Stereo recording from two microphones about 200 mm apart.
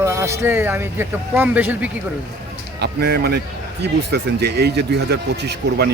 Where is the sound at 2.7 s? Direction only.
55° right (ahead or behind).